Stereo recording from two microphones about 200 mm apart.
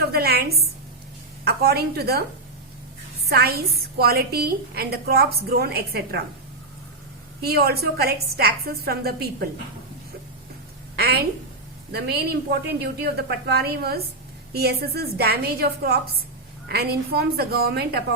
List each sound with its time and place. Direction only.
0.0 s a sound: 50° right (ahead or behind)
1.5 s a woman's voice: 50° right (ahead or behind)
3.2 s a woman's voice: 50° right (ahead or behind)
7.4 s a woman's voice: 50° right (ahead or behind)
10.9 s a sound: 50° right (ahead or behind)
11.9 s a woman's voice: 55° right (ahead or behind)